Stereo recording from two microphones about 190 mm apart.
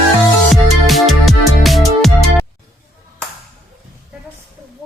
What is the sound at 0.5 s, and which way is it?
Music, centre (ahead or behind).